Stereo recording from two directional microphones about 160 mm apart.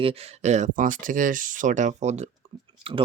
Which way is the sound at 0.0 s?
35° right (ahead or behind).